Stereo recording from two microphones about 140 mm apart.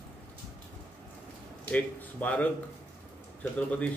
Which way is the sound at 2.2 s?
10° left (ahead or behind).